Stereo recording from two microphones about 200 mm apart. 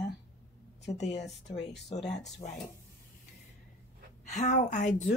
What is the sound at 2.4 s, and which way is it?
Speech, 35° left (ahead or behind).